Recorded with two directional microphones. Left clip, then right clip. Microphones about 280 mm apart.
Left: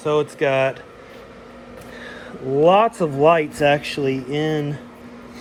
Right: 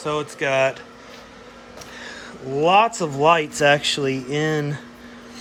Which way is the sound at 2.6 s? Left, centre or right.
Centre.